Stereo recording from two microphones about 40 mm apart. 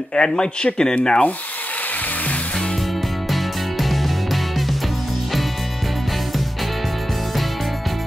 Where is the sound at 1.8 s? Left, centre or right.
Left.